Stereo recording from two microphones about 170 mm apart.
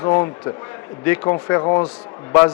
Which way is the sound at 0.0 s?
20° left (ahead or behind).